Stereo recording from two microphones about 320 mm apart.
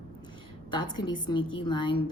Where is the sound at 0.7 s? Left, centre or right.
Centre.